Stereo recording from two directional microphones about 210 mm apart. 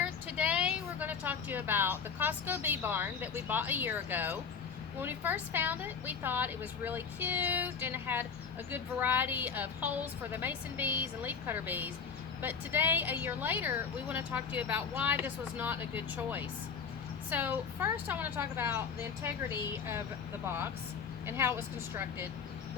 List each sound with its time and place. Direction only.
0.0 s speech: 5° right (ahead or behind)
21.2 s speech: 10° right (ahead or behind)